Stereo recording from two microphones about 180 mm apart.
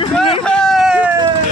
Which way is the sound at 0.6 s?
Centre (ahead or behind).